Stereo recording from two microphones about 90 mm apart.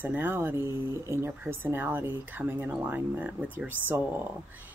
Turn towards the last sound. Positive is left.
turn(degrees=-20)  # may be behind; listen again after turning